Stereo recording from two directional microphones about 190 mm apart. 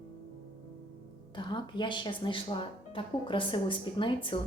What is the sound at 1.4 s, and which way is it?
Speech, 25° left (ahead or behind).